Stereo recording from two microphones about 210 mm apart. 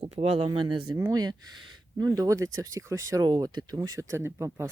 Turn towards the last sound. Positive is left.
turn(degrees=-10)  # may be behind; listen again after turning